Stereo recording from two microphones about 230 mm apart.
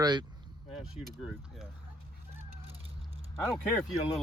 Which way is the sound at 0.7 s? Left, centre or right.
Centre.